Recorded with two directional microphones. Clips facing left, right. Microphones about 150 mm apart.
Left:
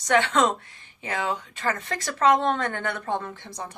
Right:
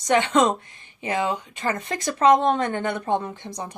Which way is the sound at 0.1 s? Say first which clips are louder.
Right 2 dB; 15° right (ahead or behind).